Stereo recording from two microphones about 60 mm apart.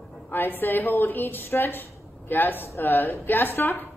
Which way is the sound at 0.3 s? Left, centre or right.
Left.